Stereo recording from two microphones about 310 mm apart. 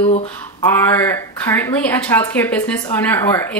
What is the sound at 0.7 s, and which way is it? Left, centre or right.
A woman's voice, centre.